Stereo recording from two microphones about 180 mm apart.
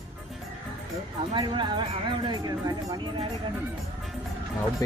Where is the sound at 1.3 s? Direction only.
30° right (ahead or behind).